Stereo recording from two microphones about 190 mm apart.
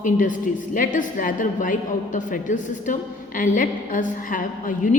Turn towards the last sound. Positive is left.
turn(degrees=45)  # may be behind; listen again after turning